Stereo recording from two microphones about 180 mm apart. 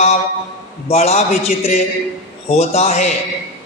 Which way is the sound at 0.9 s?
35° left (ahead or behind).